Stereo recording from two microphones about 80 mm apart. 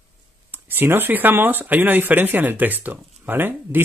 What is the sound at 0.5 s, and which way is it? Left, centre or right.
Speech, right.